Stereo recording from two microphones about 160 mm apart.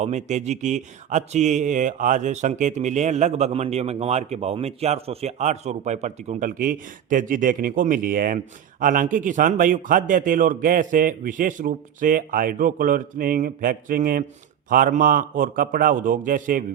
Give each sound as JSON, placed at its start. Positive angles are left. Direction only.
{"t": 0.0, "sound": "speech", "side_deg": -45}
{"t": 6.5, "sound": "a man's voice", "side_deg": -60}